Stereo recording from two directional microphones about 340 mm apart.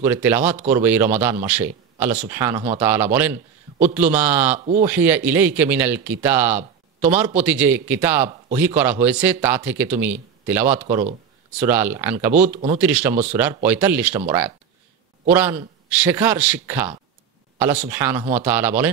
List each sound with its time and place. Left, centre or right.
0.0 s a man's voice: centre
10.8 s speech: centre
11.6 s a man's voice: centre
12.4 s speech: centre
12.8 s a man's voice: centre
15.2 s a man's voice: centre